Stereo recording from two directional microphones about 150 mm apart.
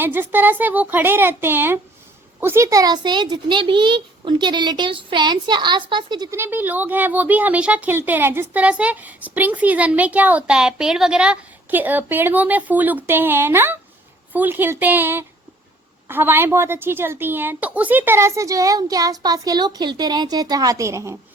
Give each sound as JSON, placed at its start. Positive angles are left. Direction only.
{"t": 0.0, "sound": "a woman's voice", "side_deg": -15}
{"t": 6.3, "sound": "a woman's voice", "side_deg": -15}